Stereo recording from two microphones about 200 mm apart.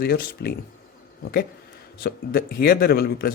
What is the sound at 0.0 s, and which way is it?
Speech, 50° left (ahead or behind).